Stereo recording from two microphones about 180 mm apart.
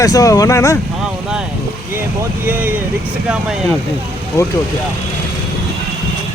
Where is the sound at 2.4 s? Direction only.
10° right (ahead or behind).